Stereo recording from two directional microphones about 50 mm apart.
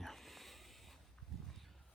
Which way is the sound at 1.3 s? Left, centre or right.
Centre.